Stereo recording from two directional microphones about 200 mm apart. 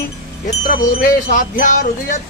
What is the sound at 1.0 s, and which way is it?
Music, 40° left (ahead or behind).